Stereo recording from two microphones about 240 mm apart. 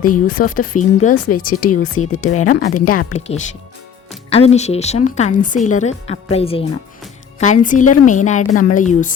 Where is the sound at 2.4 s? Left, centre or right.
Left.